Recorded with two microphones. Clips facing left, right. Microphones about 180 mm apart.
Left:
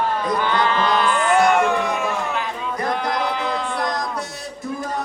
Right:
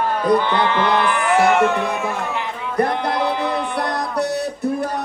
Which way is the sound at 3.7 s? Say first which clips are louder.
Right 2 dB; 65° right (ahead or behind).